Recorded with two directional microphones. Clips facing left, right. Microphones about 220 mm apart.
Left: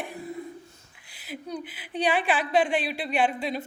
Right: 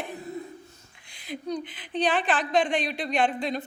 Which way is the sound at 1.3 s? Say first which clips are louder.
Right 3 dB; 5° left (ahead or behind).